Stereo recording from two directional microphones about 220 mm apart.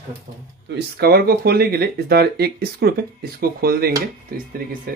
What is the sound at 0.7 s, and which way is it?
Speech, 50° right (ahead or behind).